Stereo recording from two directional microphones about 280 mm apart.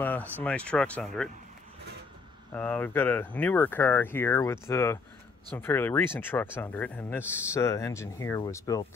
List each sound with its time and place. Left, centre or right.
0.0 s speech: centre
2.5 s speech: centre